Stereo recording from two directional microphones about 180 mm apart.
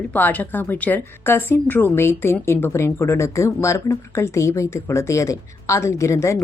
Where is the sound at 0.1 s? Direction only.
10° left (ahead or behind).